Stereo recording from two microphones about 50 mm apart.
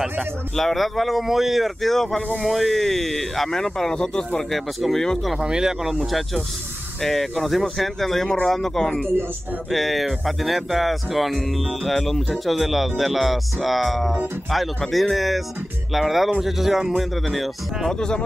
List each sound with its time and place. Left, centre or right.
0.6 s speech: centre
4.4 s speech: centre
5.4 s speech: centre
17.9 s speech: centre